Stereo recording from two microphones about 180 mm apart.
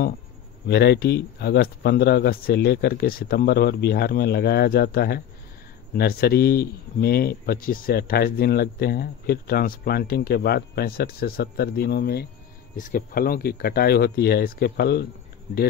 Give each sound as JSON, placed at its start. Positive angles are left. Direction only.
{"t": 0.7, "sound": "speech", "side_deg": 65}
{"t": 12.7, "sound": "speech", "side_deg": 45}